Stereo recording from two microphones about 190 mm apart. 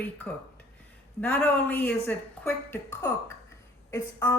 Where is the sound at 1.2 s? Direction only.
10° left (ahead or behind).